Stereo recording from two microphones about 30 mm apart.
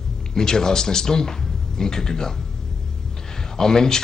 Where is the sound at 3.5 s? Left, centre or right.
Centre.